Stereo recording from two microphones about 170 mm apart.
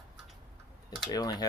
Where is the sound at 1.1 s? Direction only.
20° left (ahead or behind).